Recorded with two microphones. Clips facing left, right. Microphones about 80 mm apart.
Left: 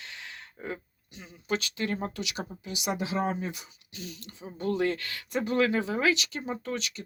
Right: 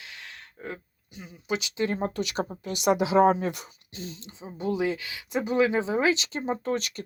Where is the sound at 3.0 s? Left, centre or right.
Right.